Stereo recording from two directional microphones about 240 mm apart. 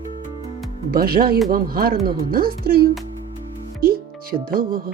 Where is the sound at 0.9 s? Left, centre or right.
Right.